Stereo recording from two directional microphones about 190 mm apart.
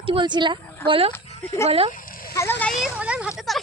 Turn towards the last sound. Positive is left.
turn(degrees=0)  # may be behind; listen again after turning